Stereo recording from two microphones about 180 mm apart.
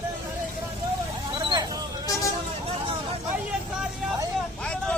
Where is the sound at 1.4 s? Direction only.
25° right (ahead or behind).